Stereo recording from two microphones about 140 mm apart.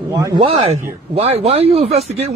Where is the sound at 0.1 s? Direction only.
25° right (ahead or behind).